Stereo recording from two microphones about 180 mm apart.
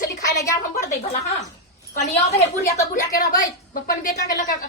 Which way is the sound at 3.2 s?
55° left (ahead or behind).